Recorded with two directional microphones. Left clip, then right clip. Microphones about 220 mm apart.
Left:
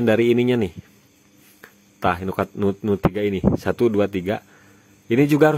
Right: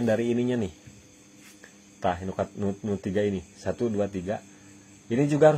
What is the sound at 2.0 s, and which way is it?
A man's voice, 40° left (ahead or behind).